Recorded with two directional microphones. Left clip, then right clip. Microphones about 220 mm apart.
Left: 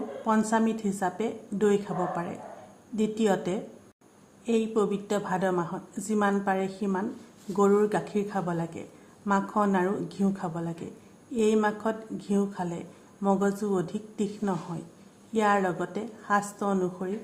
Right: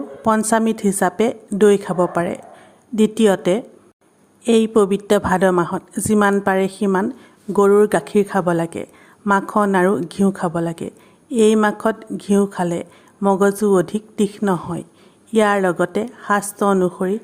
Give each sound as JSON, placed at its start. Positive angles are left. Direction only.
{"t": 0.3, "sound": "a woman's voice", "side_deg": -45}